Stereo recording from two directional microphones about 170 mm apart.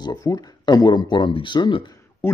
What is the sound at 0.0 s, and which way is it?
Speech, 20° left (ahead or behind).